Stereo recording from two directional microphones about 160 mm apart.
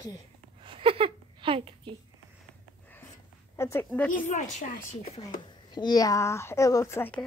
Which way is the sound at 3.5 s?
15° left (ahead or behind).